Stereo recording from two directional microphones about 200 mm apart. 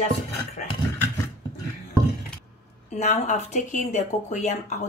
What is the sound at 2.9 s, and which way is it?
Speech, 35° left (ahead or behind).